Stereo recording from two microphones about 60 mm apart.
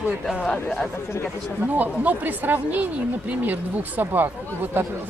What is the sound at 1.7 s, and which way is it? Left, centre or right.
Speech, right.